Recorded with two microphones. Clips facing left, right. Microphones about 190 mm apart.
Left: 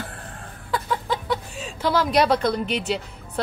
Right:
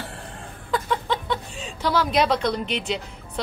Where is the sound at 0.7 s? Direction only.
5° left (ahead or behind).